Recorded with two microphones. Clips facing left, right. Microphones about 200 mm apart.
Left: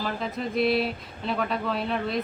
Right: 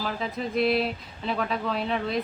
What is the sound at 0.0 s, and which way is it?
Speech, centre (ahead or behind).